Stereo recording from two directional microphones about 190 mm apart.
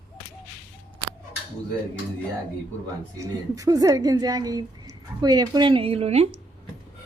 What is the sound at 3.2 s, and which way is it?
A woman's voice, 15° right (ahead or behind).